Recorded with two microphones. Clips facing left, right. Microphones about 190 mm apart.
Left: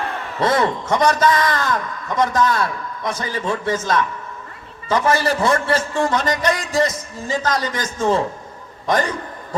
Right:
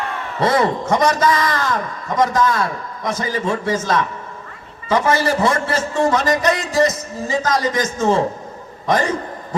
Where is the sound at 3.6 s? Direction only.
25° right (ahead or behind).